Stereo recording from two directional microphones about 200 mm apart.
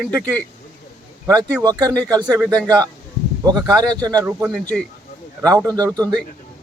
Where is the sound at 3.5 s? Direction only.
20° right (ahead or behind).